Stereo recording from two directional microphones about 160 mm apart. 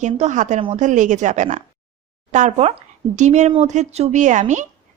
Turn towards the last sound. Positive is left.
turn(degrees=-50)  # may be behind; listen again after turning